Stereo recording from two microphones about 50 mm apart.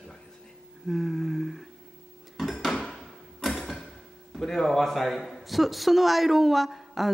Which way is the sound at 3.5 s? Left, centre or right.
Centre.